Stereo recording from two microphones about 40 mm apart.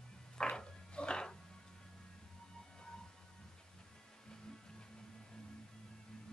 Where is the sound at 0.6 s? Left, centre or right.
Left.